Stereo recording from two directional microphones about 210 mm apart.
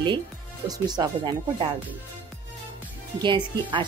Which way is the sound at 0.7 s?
20° right (ahead or behind).